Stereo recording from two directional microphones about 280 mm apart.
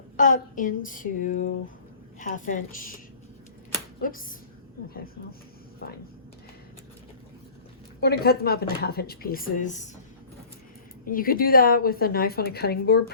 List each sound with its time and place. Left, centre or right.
0.2 s speech: left
4.0 s speech: left
8.0 s a woman's voice: left
11.0 s a woman's voice: left